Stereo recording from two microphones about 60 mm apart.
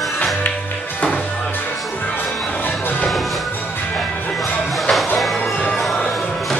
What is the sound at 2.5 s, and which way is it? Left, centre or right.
Music, left.